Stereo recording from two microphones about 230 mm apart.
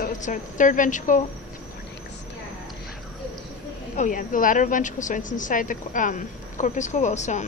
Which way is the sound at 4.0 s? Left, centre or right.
Left.